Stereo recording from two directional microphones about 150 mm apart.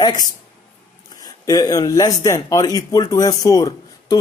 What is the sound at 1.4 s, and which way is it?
Speech, 25° left (ahead or behind).